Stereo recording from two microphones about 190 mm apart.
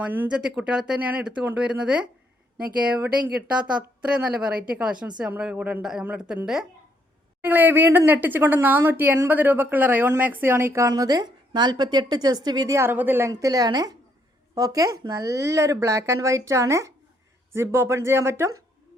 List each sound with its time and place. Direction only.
0.1 s a woman's voice: 5° right (ahead or behind)